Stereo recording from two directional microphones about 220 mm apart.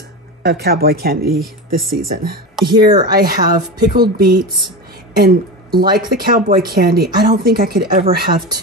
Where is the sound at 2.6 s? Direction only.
20° right (ahead or behind).